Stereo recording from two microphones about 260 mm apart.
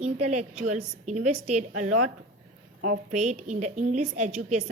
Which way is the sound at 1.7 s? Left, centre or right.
Right.